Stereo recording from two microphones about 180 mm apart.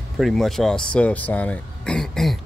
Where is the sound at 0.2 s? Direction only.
Centre (ahead or behind).